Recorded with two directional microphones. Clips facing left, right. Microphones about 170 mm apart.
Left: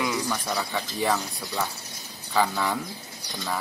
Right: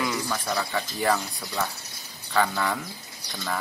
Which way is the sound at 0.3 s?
Centre (ahead or behind).